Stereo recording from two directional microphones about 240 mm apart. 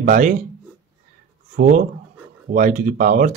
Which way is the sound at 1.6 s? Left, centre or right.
Right.